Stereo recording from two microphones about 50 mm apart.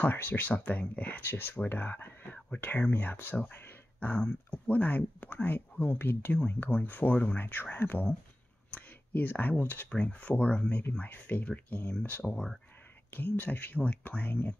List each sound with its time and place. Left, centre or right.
0.0 s speech: left
2.3 s speech: left
4.1 s speech: left
4.5 s speech: left
8.6 s speech: left
10.7 s speech: left
13.1 s speech: left